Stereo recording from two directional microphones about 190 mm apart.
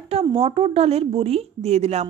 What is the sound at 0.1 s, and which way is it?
Speech, 30° right (ahead or behind).